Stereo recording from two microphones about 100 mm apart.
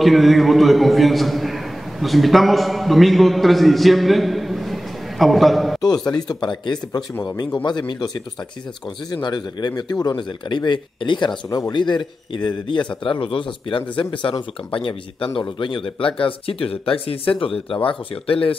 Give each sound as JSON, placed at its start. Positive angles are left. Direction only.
{"t": 0.0, "sound": "a man's voice", "side_deg": 0}
{"t": 5.8, "sound": "a man's voice", "side_deg": 40}
{"t": 9.1, "sound": "a man's voice", "side_deg": 45}